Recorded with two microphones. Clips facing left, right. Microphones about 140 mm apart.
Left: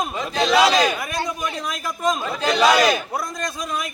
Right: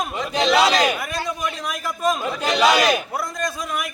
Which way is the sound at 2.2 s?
10° right (ahead or behind).